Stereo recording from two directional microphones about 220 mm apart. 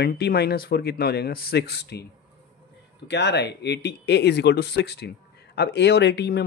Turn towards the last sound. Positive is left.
turn(degrees=50)  # may be behind; listen again after turning